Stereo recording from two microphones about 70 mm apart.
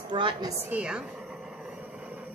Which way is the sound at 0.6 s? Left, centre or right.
Centre.